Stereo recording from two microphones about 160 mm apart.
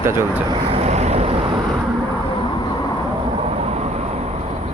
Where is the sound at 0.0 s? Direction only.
15° right (ahead or behind).